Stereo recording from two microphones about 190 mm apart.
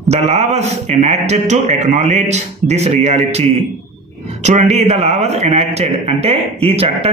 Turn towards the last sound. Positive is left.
turn(degrees=-30)  # may be behind; listen again after turning